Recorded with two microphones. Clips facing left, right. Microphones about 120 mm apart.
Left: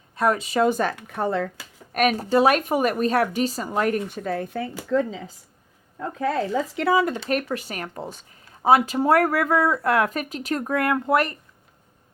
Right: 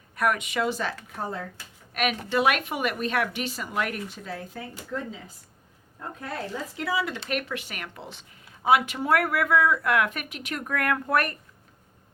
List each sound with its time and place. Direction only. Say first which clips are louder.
0.2 s speech: left 5 dB; 30° left (ahead or behind)
0.7 s speech: left 7 dB; 50° left (ahead or behind)
1.0 s speech: left 9 dB; 70° left (ahead or behind)
1.9 s speech: left 7 dB; 40° left (ahead or behind)
4.1 s speech: left 9 dB; 55° left (ahead or behind); by 5.3 s 90° left
6.7 s speech: left 7 dB; 55° left (ahead or behind); by 11.3 s 25° left (ahead or behind)